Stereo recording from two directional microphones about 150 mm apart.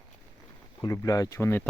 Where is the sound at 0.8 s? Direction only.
20° left (ahead or behind).